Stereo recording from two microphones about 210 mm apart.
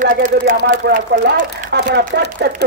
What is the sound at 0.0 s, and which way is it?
A man's voice, 40° right (ahead or behind).